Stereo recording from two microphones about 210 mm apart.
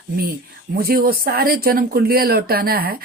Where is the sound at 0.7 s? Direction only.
45° right (ahead or behind).